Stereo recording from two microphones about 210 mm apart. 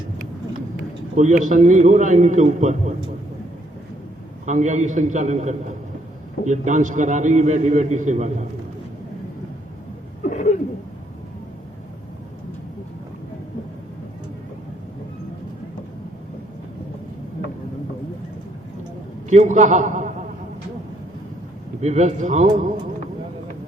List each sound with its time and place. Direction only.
1.1 s a man's voice: 35° right (ahead or behind)
4.4 s a man's voice: 35° right (ahead or behind)
10.2 s a sound: 35° left (ahead or behind)
19.3 s a man's voice: 35° right (ahead or behind)
21.8 s a man's voice: 35° right (ahead or behind)